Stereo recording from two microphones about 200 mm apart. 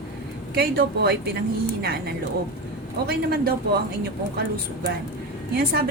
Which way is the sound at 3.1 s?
50° right (ahead or behind).